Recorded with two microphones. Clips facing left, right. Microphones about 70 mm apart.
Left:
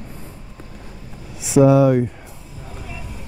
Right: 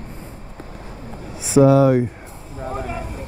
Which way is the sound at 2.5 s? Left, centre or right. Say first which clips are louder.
Right 10 dB; right.